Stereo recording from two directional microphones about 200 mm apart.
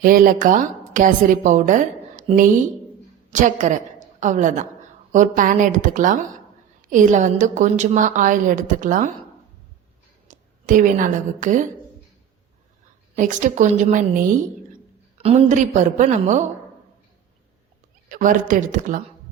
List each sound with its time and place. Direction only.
0.0 s a woman's voice: 45° right (ahead or behind)
3.2 s a woman's voice: 40° right (ahead or behind)
10.2 s a woman's voice: 40° right (ahead or behind)
13.1 s a woman's voice: 40° right (ahead or behind)
18.1 s a woman's voice: 40° right (ahead or behind)